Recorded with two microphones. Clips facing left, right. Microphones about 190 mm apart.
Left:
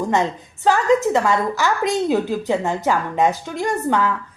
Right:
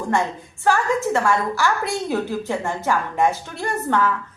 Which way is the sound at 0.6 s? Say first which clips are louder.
Left 4 dB; 20° left (ahead or behind).